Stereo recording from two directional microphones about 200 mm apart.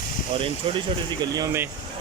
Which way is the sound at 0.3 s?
25° right (ahead or behind).